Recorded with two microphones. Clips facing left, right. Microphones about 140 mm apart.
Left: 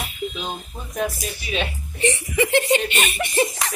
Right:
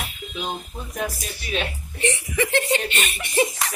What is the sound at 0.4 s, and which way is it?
A woman's voice, 5° right (ahead or behind).